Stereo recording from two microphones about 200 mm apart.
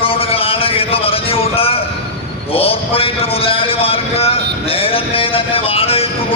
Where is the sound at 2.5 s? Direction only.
30° left (ahead or behind).